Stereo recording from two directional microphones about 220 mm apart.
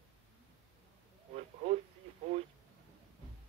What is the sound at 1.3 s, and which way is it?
Speech, 30° right (ahead or behind).